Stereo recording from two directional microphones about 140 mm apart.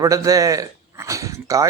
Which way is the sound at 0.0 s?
25° right (ahead or behind).